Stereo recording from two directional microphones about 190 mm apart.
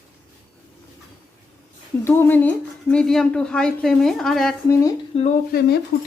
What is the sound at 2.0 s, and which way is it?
A woman's voice, 10° left (ahead or behind).